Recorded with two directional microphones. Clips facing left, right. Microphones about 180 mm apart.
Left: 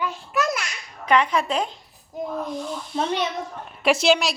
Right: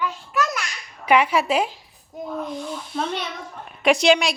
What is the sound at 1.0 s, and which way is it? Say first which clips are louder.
A woman's voice: right 2 dB; 10° right (ahead or behind).